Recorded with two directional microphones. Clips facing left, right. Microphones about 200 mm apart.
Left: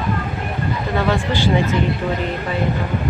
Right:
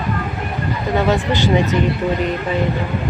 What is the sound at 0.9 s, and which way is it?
Speech, 20° right (ahead or behind).